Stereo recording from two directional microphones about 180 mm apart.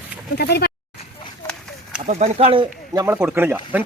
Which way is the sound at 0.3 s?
60° left (ahead or behind).